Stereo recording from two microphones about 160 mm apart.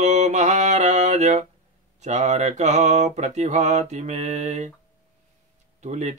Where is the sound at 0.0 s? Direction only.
45° right (ahead or behind).